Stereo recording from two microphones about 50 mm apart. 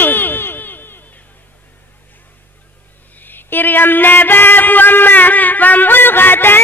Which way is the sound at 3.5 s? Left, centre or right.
Left.